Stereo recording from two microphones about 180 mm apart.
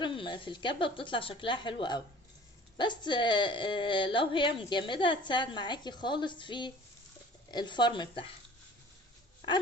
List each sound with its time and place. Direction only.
0.0 s speech: 25° left (ahead or behind)